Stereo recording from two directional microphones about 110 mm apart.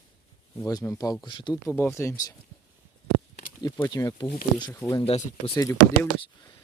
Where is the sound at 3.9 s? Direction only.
35° left (ahead or behind).